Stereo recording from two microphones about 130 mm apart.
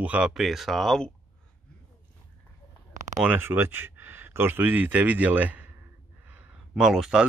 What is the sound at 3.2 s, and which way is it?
Speech, 15° right (ahead or behind).